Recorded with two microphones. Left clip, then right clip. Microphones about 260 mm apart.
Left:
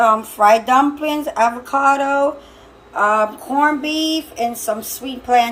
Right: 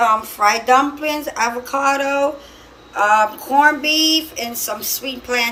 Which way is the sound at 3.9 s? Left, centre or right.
Left.